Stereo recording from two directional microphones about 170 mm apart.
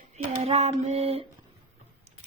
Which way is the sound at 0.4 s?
40° right (ahead or behind).